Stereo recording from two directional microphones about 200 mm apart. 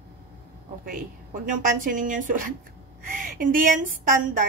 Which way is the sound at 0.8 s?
40° right (ahead or behind).